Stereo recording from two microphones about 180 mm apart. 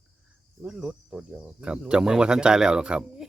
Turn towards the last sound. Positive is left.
turn(degrees=-5)  # may be behind; listen again after turning